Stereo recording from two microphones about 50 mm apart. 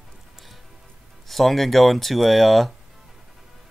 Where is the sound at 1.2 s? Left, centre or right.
Centre.